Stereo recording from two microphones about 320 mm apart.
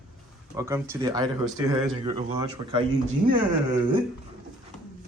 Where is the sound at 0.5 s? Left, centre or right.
Centre.